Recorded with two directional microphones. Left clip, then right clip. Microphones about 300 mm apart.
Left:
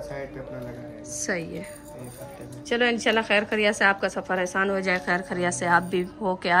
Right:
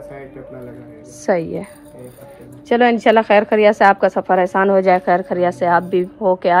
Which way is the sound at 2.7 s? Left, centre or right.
Centre.